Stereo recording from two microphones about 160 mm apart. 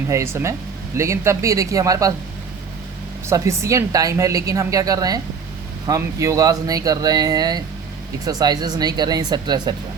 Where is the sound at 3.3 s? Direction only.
20° right (ahead or behind).